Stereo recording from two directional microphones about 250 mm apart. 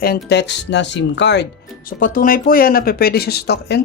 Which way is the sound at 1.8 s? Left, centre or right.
Left.